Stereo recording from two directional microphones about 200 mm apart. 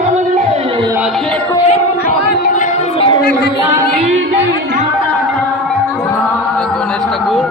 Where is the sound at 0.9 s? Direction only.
10° right (ahead or behind).